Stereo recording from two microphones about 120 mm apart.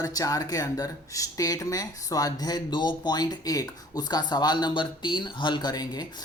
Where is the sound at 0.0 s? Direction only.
30° left (ahead or behind).